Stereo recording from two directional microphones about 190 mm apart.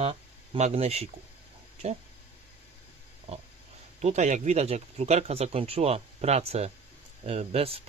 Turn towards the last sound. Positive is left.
turn(degrees=-30)  # may be behind; listen again after turning